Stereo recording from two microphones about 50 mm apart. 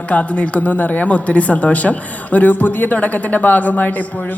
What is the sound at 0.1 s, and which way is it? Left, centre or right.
Speech, left.